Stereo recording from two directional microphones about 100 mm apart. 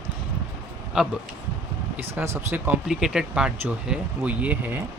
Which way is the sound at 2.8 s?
5° right (ahead or behind).